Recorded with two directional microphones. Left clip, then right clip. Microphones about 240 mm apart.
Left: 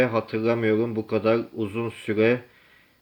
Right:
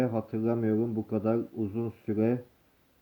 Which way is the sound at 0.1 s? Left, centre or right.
Centre.